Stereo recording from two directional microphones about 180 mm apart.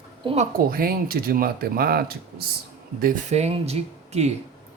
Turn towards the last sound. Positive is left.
turn(degrees=-35)  # may be behind; listen again after turning